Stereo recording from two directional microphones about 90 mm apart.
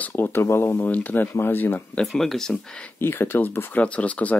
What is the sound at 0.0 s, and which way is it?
Speech, 20° left (ahead or behind).